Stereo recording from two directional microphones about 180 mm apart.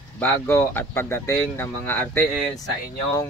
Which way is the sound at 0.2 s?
10° left (ahead or behind).